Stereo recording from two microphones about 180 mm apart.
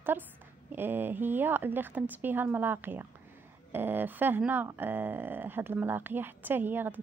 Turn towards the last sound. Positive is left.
turn(degrees=-10)  # may be behind; listen again after turning